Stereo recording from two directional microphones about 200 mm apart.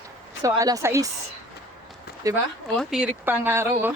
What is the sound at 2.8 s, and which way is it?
Speech, 5° right (ahead or behind).